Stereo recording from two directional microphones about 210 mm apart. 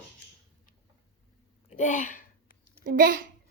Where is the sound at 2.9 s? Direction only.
40° right (ahead or behind).